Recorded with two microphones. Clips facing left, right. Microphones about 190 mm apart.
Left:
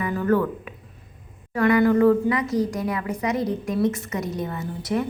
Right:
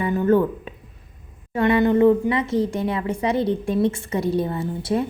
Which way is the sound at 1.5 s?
25° right (ahead or behind).